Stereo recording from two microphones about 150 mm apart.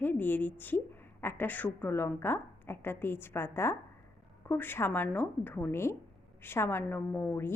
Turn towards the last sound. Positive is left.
turn(degrees=15)  # may be behind; listen again after turning